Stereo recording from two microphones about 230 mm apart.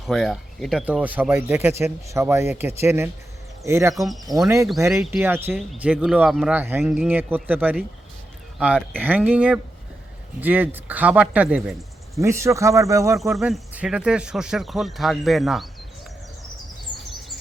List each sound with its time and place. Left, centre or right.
0.1 s speech: centre
3.9 s speech: centre
4.4 s speech: centre
4.9 s speech: centre
12.1 s speech: centre
13.3 s speech: centre